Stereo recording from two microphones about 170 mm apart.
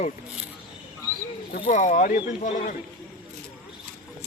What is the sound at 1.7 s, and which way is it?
Speech, 45° left (ahead or behind).